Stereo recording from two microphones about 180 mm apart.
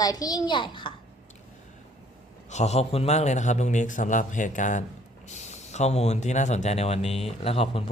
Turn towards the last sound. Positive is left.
turn(degrees=30)  # may be behind; listen again after turning